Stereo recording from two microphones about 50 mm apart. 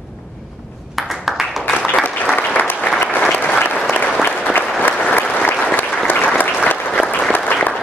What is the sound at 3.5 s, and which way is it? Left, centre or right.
Applause, left.